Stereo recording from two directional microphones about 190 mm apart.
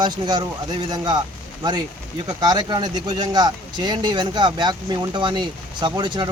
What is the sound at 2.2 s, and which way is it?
Speech, 20° right (ahead or behind).